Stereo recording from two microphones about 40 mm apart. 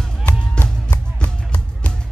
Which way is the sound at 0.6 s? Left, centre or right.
Left.